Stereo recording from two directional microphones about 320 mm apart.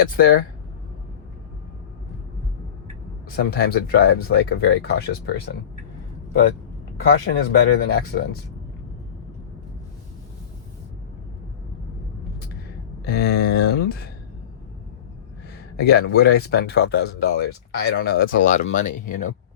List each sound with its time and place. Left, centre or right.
0.0 s speech: left
3.3 s speech: left
7.3 s speech: left
13.1 s speech: left
15.7 s speech: left